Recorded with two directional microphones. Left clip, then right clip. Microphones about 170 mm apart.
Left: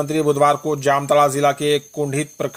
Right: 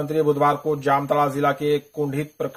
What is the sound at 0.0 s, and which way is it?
Speech, 30° left (ahead or behind).